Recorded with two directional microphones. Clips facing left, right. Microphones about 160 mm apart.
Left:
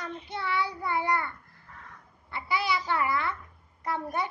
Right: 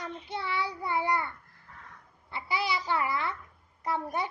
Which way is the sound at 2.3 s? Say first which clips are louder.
Left 2 dB; 30° right (ahead or behind).